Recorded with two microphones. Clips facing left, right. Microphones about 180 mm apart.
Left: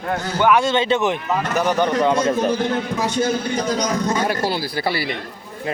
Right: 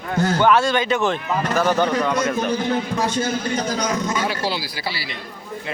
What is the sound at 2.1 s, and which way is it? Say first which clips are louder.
Speech: left 3 dB; 30° left (ahead or behind).